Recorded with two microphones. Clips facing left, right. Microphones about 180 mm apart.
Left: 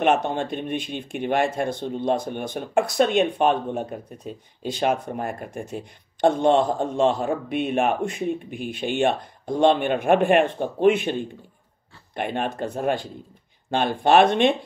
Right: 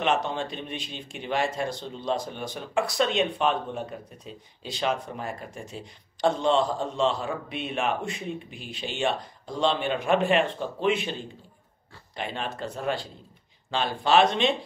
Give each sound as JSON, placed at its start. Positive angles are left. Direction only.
{"t": 0.0, "sound": "speech", "side_deg": 50}